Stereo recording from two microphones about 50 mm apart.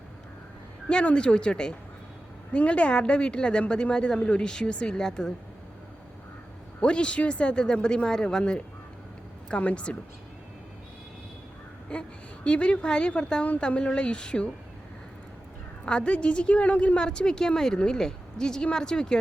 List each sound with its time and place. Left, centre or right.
0.9 s a woman's voice: left
6.8 s a woman's voice: left
11.9 s a woman's voice: left
15.9 s a woman's voice: centre